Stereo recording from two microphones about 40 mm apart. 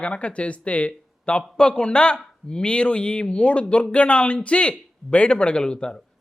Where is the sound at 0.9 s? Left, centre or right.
Left.